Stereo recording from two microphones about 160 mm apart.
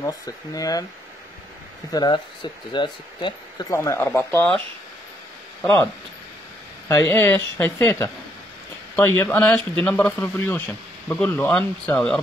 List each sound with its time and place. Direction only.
0.0 s speech: 20° left (ahead or behind)
1.9 s speech: 25° left (ahead or behind)
3.7 s speech: 20° left (ahead or behind)
5.6 s speech: 15° left (ahead or behind)
6.9 s speech: 15° left (ahead or behind)